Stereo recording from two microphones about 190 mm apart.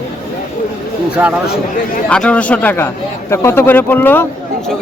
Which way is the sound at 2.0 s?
5° left (ahead or behind).